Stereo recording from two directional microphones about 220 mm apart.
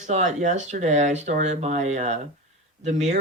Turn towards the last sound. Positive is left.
turn(degrees=-30)  # may be behind; listen again after turning